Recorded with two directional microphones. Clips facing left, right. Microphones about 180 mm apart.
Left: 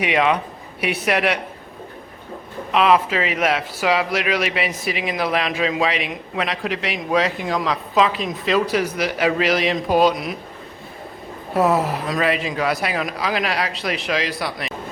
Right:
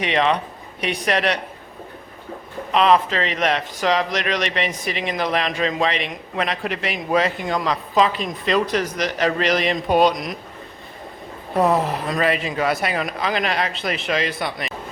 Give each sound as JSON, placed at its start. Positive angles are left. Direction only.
{"t": 0.0, "sound": "a woman's voice", "side_deg": 10}
{"t": 2.7, "sound": "a man's voice", "side_deg": 5}
{"t": 11.5, "sound": "a man's voice", "side_deg": 0}